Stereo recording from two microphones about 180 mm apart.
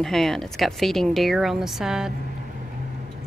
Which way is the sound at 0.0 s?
Centre (ahead or behind).